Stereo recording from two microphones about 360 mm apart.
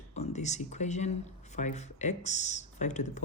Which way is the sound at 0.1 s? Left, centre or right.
Centre.